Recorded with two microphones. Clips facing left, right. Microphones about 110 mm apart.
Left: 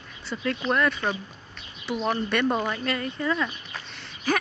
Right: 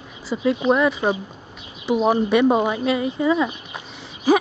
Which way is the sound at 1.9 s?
30° right (ahead or behind).